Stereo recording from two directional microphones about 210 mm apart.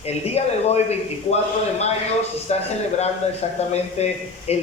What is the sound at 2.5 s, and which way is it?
Speech, 30° left (ahead or behind).